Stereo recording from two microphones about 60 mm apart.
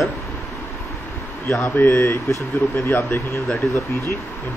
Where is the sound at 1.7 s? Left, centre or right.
Left.